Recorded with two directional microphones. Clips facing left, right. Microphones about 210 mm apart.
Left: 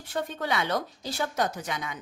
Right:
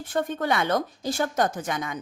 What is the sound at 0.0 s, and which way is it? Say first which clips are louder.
A woman's voice: right 5 dB; 50° right (ahead or behind).